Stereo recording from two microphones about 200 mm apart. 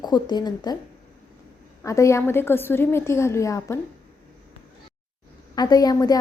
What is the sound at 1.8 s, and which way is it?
A woman's voice, 15° left (ahead or behind).